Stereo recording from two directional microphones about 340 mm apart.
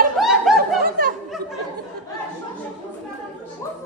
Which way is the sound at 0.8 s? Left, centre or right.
Right.